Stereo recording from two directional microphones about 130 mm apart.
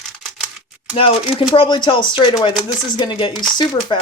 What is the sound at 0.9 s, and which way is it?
Speech, 40° left (ahead or behind).